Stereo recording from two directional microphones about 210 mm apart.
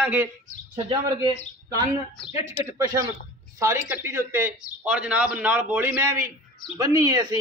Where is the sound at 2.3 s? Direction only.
15° right (ahead or behind).